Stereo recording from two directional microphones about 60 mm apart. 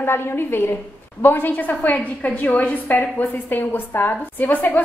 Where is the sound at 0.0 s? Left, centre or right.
Left.